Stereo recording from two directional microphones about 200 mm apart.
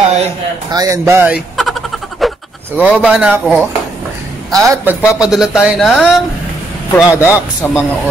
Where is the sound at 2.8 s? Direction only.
Centre (ahead or behind).